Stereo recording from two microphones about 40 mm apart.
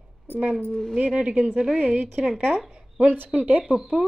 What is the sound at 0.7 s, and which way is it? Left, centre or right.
Speech, centre.